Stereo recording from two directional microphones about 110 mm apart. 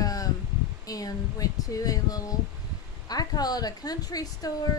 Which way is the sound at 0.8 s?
35° left (ahead or behind).